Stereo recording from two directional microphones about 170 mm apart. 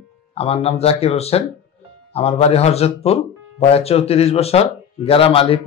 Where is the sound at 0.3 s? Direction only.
35° left (ahead or behind).